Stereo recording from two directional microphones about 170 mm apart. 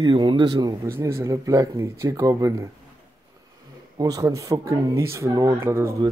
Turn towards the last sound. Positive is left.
turn(degrees=-15)  # may be behind; listen again after turning